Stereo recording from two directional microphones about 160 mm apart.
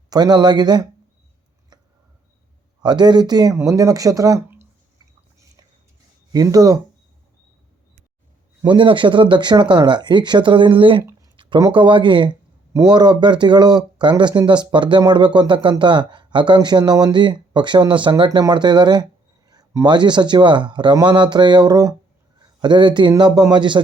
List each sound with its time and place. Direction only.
0.1 s speech: 25° right (ahead or behind)
2.8 s speech: 25° right (ahead or behind)
6.3 s speech: 25° right (ahead or behind)
8.6 s speech: 30° right (ahead or behind)